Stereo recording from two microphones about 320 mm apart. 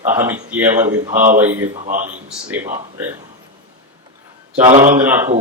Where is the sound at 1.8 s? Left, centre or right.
Right.